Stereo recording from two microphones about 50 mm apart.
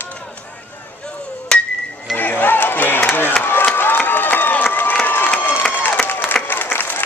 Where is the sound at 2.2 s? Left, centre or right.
Left.